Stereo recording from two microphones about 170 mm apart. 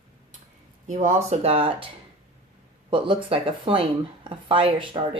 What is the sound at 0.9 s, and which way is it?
Speech, 45° right (ahead or behind).